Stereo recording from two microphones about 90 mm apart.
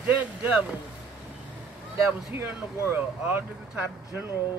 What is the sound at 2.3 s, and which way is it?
Speech, 25° right (ahead or behind).